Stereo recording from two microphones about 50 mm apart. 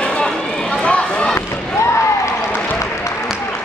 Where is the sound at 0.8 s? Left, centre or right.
Left.